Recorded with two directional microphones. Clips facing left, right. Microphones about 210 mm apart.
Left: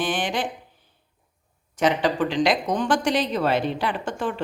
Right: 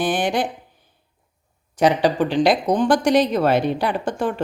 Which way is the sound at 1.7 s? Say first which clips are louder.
Right 4 dB; 35° right (ahead or behind).